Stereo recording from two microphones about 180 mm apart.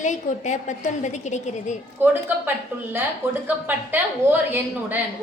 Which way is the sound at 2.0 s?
10° right (ahead or behind).